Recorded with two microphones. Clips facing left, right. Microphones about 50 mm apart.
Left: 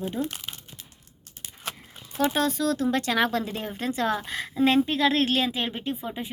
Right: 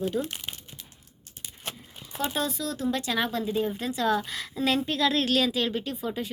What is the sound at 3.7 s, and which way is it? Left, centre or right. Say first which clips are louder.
Speech: even; left.